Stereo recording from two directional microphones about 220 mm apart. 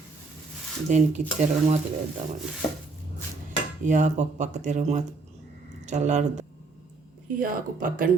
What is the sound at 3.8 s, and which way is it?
Speech, 35° right (ahead or behind).